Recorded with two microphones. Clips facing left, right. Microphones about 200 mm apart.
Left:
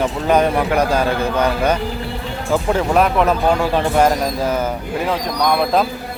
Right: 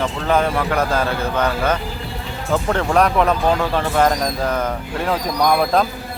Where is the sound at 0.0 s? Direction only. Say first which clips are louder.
Left 3 dB; 15° left (ahead or behind).